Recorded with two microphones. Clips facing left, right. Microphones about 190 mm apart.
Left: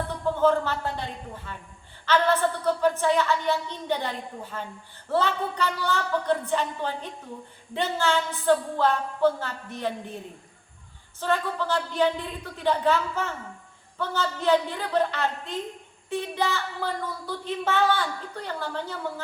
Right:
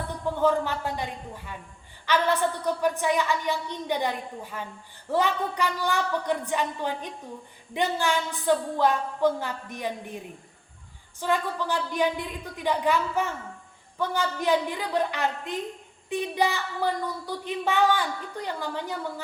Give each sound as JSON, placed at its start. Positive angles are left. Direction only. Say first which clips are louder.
{"t": 0.4, "sound": "a woman's voice", "louder": "left 1 dB", "side_deg": -15}
{"t": 11.2, "sound": "a woman's voice", "louder": "even", "side_deg": -15}